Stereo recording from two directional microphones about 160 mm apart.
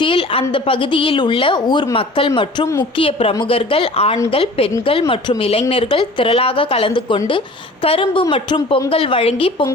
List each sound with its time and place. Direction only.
0.0 s a woman's voice: 35° left (ahead or behind)